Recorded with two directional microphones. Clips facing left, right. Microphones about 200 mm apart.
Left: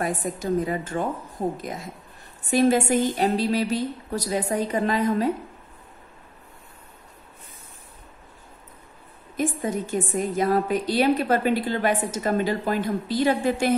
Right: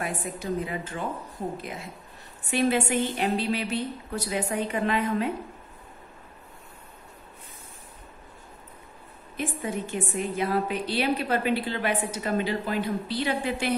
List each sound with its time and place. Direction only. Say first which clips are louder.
0.0 s a woman's voice: left 5 dB; 40° left (ahead or behind)
9.4 s a woman's voice: left 5 dB; 40° left (ahead or behind)